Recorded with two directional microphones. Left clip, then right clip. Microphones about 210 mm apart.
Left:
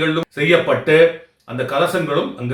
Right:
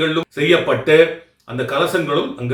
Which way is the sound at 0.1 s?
10° right (ahead or behind).